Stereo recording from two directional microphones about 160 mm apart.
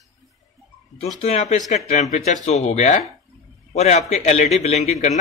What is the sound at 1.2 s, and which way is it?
Speech, 45° left (ahead or behind).